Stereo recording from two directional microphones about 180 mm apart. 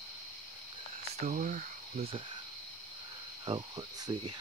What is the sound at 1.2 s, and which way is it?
Speech, 45° right (ahead or behind).